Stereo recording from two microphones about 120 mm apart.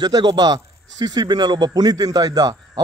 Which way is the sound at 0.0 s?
35° right (ahead or behind).